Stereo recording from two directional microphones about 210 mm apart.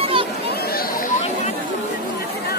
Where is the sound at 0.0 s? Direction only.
25° right (ahead or behind).